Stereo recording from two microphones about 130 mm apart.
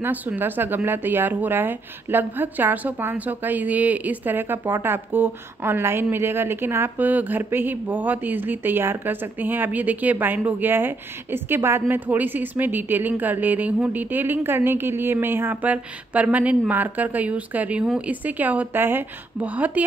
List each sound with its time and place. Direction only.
0.0 s speech: 15° right (ahead or behind)